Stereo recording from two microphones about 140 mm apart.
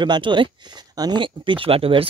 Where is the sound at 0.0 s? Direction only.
35° right (ahead or behind).